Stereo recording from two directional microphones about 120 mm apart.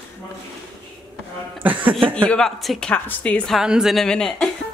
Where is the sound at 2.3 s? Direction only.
5° left (ahead or behind).